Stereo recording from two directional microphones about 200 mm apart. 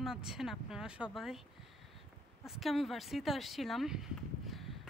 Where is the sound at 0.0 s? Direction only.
Centre (ahead or behind).